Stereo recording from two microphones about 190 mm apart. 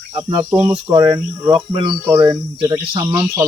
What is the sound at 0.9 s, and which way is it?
Speech, 20° right (ahead or behind).